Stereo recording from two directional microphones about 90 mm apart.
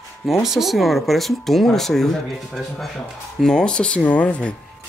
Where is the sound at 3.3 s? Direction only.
5° left (ahead or behind).